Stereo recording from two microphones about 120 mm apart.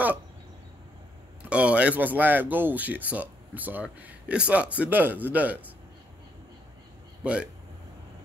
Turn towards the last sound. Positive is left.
turn(degrees=-10)  # may be behind; listen again after turning